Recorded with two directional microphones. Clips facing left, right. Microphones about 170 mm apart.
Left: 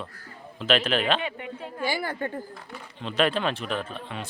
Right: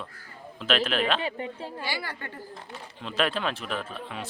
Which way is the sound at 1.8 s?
50° left (ahead or behind).